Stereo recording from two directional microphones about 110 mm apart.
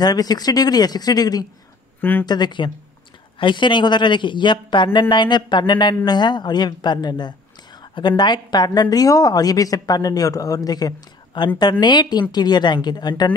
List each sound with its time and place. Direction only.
0.0 s speech: 35° left (ahead or behind)
2.0 s speech: 20° left (ahead or behind)
2.2 s speech: 40° left (ahead or behind)